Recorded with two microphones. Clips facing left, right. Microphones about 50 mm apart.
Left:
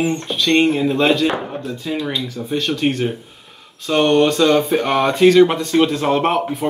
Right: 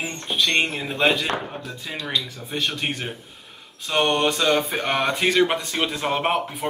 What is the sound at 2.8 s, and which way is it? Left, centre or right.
Speech, centre.